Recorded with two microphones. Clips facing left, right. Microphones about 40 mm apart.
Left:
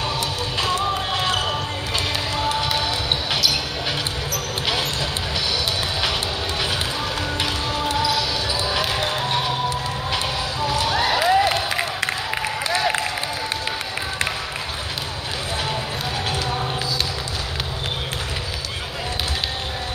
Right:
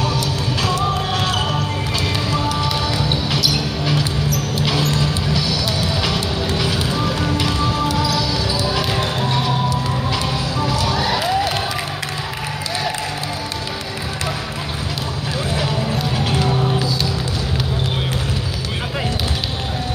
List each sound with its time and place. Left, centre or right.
0.6 s music: left
7.3 s music: left
9.3 s music: left
10.7 s crowd: left